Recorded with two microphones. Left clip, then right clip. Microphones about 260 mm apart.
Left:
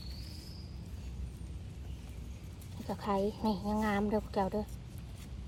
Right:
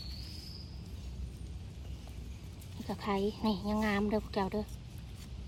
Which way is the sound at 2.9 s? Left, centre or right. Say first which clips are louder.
Left 1 dB; right.